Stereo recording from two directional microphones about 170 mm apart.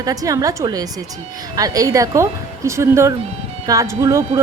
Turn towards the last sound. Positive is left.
turn(degrees=-20)  # may be behind; listen again after turning